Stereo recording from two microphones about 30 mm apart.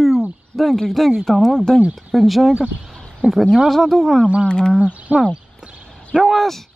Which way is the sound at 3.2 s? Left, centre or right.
Right.